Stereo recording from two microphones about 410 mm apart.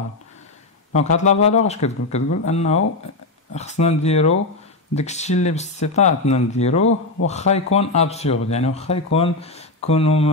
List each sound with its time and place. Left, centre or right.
0.9 s speech: centre